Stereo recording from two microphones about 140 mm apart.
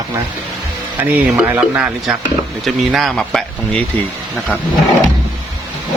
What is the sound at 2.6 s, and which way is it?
Speech, centre (ahead or behind).